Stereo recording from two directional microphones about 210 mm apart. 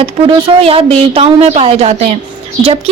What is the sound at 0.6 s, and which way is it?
Speech, 25° right (ahead or behind).